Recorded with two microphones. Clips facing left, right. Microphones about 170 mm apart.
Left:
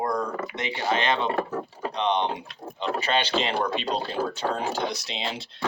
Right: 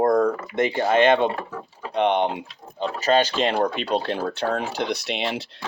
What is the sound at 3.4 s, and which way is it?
Speech, 50° right (ahead or behind).